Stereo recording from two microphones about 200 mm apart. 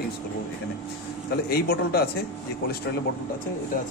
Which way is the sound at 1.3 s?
50° left (ahead or behind).